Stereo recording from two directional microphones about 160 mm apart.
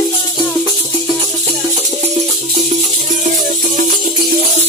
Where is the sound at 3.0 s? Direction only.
55° right (ahead or behind).